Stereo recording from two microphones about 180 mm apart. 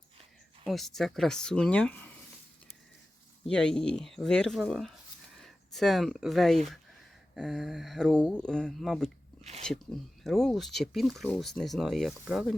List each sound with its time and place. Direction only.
0.6 s speech: centre (ahead or behind)
3.4 s speech: 5° left (ahead or behind)
9.4 s speech: 35° right (ahead or behind)
9.6 s speech: centre (ahead or behind)